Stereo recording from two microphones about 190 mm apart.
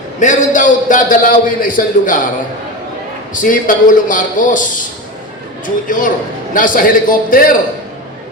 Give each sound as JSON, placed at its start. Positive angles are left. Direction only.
{"t": 0.2, "sound": "a man's voice", "side_deg": 40}
{"t": 3.3, "sound": "a man's voice", "side_deg": 45}
{"t": 5.6, "sound": "a man's voice", "side_deg": 45}